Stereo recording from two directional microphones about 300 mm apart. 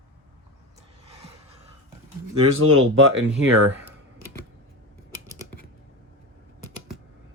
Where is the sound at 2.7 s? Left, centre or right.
Right.